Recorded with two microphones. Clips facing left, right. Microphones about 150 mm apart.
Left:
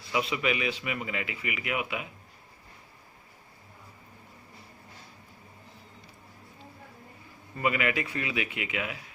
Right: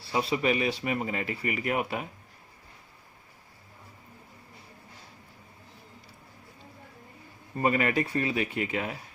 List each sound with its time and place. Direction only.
0.0 s speech: 35° right (ahead or behind)
7.5 s speech: 40° right (ahead or behind)